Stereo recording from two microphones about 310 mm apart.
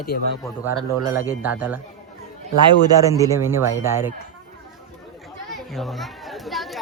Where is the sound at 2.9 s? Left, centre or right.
Centre.